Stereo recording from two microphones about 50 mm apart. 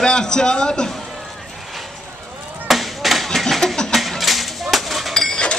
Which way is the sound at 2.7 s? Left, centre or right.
Centre.